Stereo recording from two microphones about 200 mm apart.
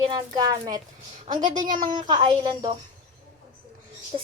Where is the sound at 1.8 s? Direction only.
20° right (ahead or behind).